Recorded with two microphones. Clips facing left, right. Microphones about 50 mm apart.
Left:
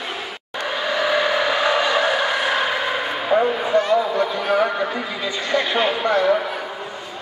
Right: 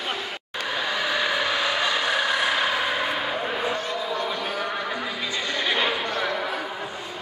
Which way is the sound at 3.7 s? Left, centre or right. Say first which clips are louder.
Left 10 dB; left.